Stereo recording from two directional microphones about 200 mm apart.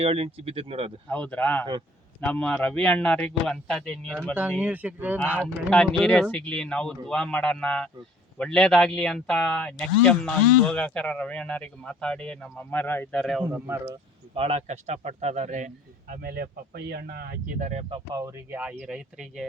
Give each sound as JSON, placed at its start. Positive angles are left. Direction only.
{"t": 0.0, "sound": "speech", "side_deg": -30}
{"t": 1.0, "sound": "speech", "side_deg": 5}
{"t": 4.6, "sound": "speech", "side_deg": -10}
{"t": 5.4, "sound": "speech", "side_deg": 5}
{"t": 13.5, "sound": "speech", "side_deg": -10}
{"t": 14.3, "sound": "speech", "side_deg": -30}
{"t": 17.7, "sound": "speech", "side_deg": -30}